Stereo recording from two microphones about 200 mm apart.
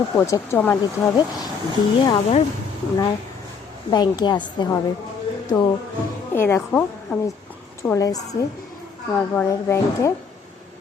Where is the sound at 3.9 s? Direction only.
20° left (ahead or behind).